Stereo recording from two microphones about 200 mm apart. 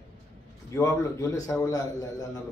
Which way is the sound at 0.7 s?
15° left (ahead or behind).